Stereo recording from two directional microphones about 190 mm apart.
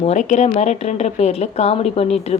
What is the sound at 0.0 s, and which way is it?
A woman's voice, 35° left (ahead or behind).